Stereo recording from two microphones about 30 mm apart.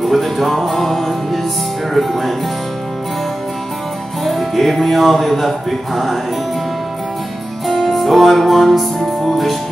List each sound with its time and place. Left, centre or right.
0.0 s music: centre
4.2 s music: centre
7.6 s music: centre